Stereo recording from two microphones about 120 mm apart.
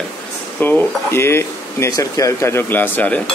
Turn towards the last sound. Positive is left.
turn(degrees=15)  # may be behind; listen again after turning